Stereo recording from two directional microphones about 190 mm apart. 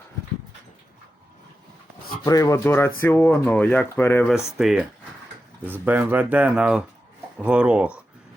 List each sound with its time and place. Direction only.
2.2 s speech: 15° left (ahead or behind)
4.5 s speech: centre (ahead or behind)